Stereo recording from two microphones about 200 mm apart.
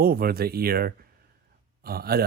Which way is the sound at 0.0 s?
50° right (ahead or behind).